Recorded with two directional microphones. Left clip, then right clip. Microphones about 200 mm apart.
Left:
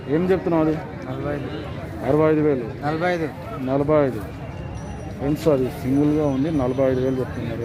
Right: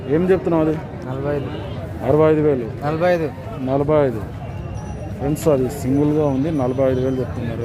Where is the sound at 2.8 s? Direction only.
40° right (ahead or behind).